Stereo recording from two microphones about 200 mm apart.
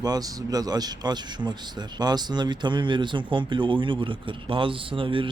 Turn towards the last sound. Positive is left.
turn(degrees=-25)  # may be behind; listen again after turning